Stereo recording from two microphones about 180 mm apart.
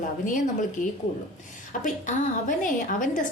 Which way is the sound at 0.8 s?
45° left (ahead or behind).